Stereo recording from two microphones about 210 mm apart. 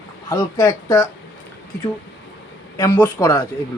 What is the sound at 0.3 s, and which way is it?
Speech, 20° left (ahead or behind).